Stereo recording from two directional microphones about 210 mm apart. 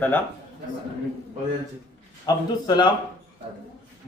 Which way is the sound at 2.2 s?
20° left (ahead or behind).